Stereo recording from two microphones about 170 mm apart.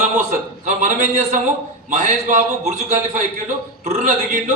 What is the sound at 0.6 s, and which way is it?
A man's voice, 45° right (ahead or behind).